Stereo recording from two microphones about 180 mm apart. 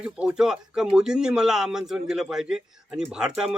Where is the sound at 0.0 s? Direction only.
5° right (ahead or behind).